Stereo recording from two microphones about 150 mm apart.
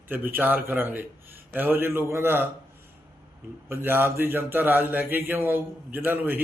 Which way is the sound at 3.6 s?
15° right (ahead or behind).